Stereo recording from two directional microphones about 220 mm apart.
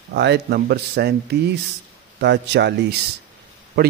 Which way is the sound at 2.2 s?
50° right (ahead or behind).